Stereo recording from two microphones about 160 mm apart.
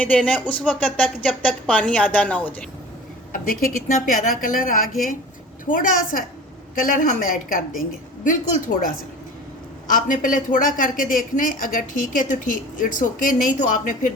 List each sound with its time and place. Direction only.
0.0 s speech: 10° left (ahead or behind)
3.3 s a woman's voice: 60° left (ahead or behind)